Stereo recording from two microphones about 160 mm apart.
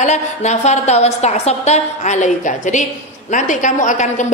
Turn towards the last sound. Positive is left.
turn(degrees=50)  # may be behind; listen again after turning